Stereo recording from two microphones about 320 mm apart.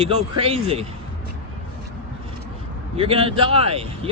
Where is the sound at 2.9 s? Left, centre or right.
Centre.